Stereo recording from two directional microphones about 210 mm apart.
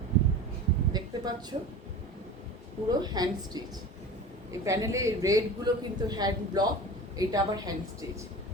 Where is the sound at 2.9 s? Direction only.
20° right (ahead or behind).